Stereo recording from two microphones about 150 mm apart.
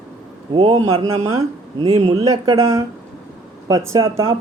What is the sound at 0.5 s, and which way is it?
Speech, 35° right (ahead or behind).